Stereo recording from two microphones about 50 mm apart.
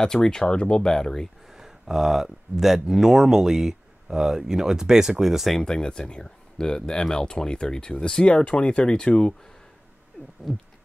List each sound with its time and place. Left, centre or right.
0.0 s speech: centre
1.5 s speech: centre
5.6 s speech: centre
10.2 s a sound: left